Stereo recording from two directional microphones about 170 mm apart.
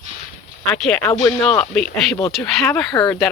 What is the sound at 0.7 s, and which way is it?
Speech, 10° left (ahead or behind).